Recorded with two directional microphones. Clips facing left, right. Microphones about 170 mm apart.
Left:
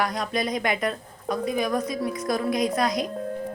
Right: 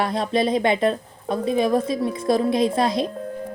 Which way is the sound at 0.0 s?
25° right (ahead or behind).